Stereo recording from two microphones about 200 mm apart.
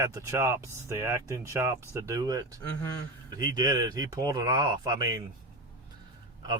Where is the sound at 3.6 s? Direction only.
20° right (ahead or behind).